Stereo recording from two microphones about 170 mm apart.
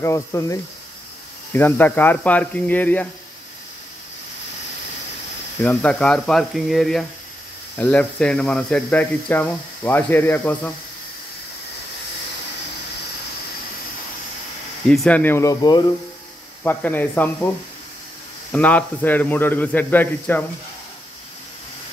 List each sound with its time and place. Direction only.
0.0 s speech: 15° left (ahead or behind)
5.6 s speech: 10° left (ahead or behind)
14.9 s speech: 5° left (ahead or behind)
16.6 s speech: 10° left (ahead or behind)
18.5 s speech: 10° left (ahead or behind)